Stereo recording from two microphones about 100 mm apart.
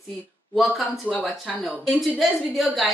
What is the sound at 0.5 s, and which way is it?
A woman's voice, centre (ahead or behind).